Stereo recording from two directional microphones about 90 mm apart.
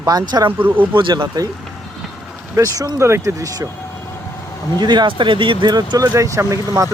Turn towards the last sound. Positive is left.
turn(degrees=-35)  # may be behind; listen again after turning